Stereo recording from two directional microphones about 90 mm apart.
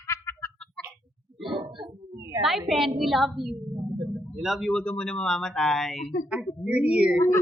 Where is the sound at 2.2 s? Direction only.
35° right (ahead or behind).